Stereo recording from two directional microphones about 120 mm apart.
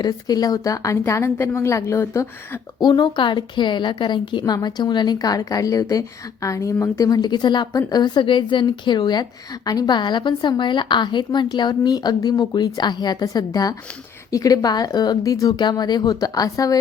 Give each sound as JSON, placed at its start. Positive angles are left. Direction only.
{"t": 0.0, "sound": "a woman's voice", "side_deg": 30}
{"t": 2.8, "sound": "a woman's voice", "side_deg": 40}